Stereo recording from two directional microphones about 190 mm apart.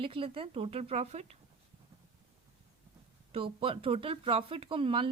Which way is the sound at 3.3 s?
30° right (ahead or behind).